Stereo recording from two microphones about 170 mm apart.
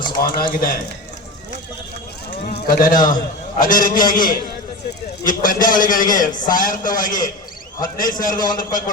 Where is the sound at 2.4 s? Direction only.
65° left (ahead or behind).